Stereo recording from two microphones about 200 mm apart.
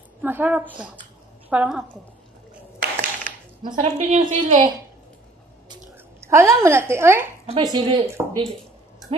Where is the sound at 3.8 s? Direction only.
35° right (ahead or behind).